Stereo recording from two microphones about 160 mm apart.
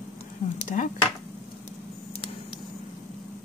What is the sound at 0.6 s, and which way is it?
Speech, 55° left (ahead or behind).